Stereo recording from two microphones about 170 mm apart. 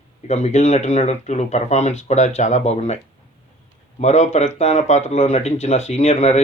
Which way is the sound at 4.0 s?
40° left (ahead or behind).